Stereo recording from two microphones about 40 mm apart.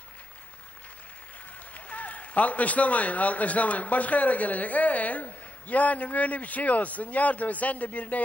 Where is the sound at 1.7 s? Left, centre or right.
Left.